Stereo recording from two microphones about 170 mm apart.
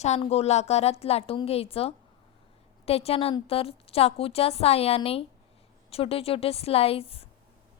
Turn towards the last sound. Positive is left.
turn(degrees=35)  # may be behind; listen again after turning